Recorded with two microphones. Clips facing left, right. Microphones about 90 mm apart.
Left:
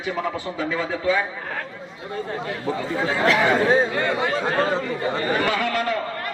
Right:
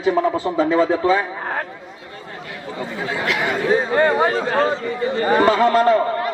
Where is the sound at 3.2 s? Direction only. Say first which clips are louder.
Left 3 dB; 35° left (ahead or behind).